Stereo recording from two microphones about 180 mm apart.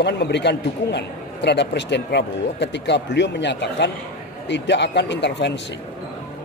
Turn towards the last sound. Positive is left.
turn(degrees=75)  # may be behind; listen again after turning